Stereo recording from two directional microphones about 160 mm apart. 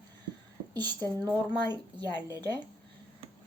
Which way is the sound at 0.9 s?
25° right (ahead or behind).